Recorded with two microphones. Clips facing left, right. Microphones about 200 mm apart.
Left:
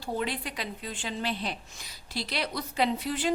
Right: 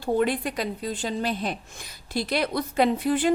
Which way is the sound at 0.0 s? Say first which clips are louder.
Right 9 dB; 50° right (ahead or behind).